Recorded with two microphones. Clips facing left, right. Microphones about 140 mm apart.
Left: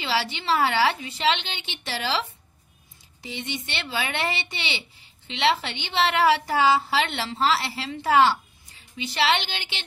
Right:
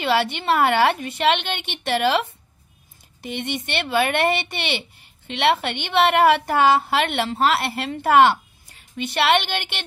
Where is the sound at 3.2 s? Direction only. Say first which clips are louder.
Right 6 dB; 55° right (ahead or behind).